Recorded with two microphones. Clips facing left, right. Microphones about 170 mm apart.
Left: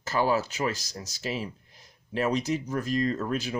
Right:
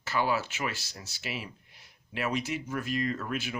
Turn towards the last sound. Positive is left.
turn(degrees=35)  # may be behind; listen again after turning